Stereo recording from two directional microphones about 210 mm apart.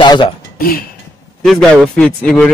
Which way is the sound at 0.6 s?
45° left (ahead or behind).